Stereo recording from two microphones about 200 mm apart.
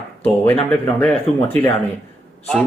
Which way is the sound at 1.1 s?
30° left (ahead or behind).